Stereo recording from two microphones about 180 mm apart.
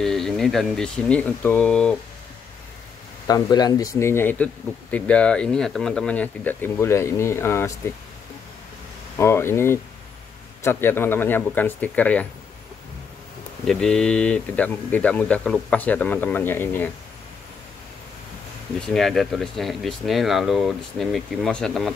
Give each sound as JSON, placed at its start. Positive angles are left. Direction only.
{"t": 0.0, "sound": "speech", "side_deg": 0}
{"t": 3.3, "sound": "speech", "side_deg": 20}
{"t": 9.2, "sound": "speech", "side_deg": 15}
{"t": 13.7, "sound": "speech", "side_deg": 5}
{"t": 18.8, "sound": "speech", "side_deg": 0}